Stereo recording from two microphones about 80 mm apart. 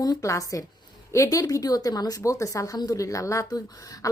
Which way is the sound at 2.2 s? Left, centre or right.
Left.